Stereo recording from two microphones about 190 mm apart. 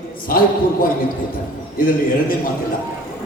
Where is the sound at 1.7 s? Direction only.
50° left (ahead or behind).